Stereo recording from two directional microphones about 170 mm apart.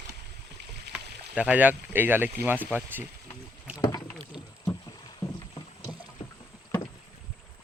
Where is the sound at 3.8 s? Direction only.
20° left (ahead or behind).